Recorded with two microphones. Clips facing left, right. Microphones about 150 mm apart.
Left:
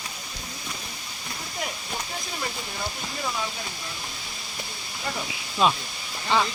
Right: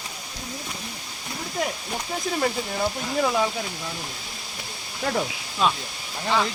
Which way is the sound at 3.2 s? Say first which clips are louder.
Right 8 dB; 85° right.